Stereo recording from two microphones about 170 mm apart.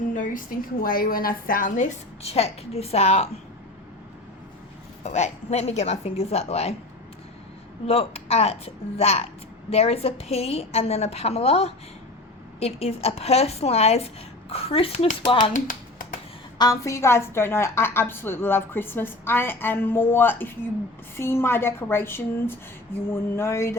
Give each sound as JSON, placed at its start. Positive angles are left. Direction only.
{"t": 0.1, "sound": "a woman's voice", "side_deg": 50}
{"t": 5.0, "sound": "a woman's voice", "side_deg": 40}
{"t": 7.9, "sound": "a woman's voice", "side_deg": 35}
{"t": 15.5, "sound": "a sound", "side_deg": 50}
{"t": 16.6, "sound": "a woman's voice", "side_deg": 20}